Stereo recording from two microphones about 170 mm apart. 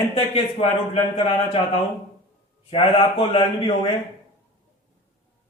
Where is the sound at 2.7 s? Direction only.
35° left (ahead or behind).